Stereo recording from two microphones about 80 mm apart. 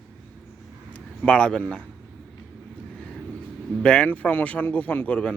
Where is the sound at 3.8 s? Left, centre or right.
Centre.